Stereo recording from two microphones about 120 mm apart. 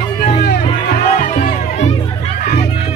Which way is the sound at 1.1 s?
90° left.